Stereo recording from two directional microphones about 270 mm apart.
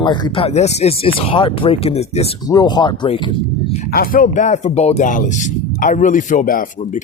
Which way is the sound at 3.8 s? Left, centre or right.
Left.